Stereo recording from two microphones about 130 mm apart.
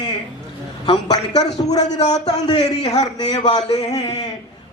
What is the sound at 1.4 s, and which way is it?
A man's voice, 30° left (ahead or behind).